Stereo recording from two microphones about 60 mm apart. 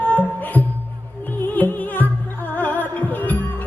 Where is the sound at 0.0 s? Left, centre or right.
Left.